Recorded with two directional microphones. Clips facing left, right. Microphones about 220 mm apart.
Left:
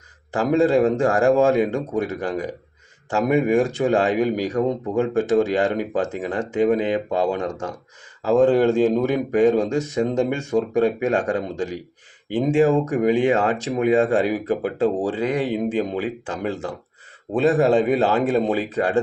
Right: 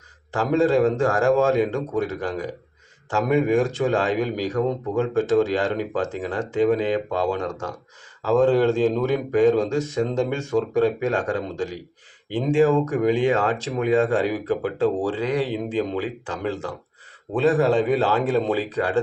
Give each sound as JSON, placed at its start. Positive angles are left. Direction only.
{"t": 0.3, "sound": "speech", "side_deg": 15}